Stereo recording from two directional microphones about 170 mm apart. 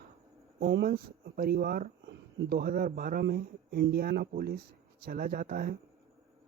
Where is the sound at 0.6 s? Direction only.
70° right (ahead or behind).